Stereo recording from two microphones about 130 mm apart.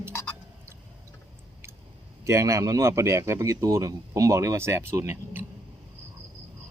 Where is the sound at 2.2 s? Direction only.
25° right (ahead or behind).